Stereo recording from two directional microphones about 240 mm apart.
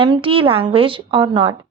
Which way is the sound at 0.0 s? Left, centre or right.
Right.